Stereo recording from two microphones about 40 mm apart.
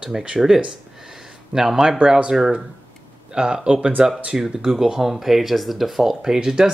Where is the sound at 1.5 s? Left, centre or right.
Centre; by 4.0 s right.